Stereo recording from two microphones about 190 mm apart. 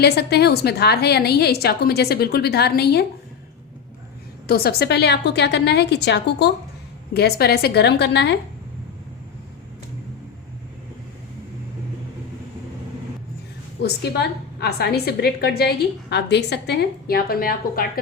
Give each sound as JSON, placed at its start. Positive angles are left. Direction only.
{"t": 0.0, "sound": "a woman's voice", "side_deg": 60}
{"t": 4.4, "sound": "a woman's voice", "side_deg": 55}
{"t": 13.8, "sound": "a woman's voice", "side_deg": 60}